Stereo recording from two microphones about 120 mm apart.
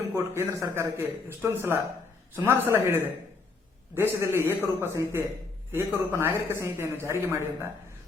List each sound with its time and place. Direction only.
0.0 s a man's voice: 25° right (ahead or behind)